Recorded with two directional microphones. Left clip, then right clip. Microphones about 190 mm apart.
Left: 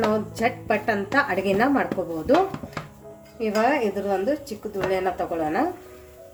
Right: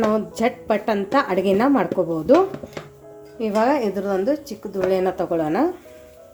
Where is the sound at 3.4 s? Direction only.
35° right (ahead or behind).